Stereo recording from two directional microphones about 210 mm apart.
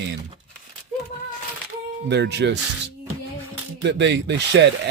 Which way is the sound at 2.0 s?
55° right (ahead or behind).